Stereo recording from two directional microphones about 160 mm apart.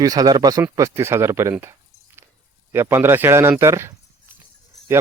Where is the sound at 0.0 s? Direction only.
25° right (ahead or behind).